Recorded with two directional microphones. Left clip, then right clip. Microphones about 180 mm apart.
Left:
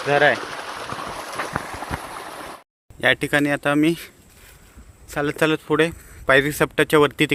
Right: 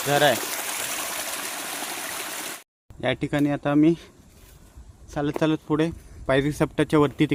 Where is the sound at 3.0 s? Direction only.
Centre (ahead or behind).